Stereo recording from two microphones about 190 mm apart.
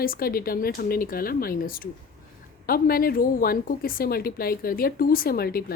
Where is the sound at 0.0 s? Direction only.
50° left (ahead or behind).